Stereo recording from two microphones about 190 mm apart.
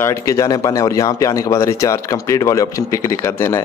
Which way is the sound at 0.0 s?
15° left (ahead or behind).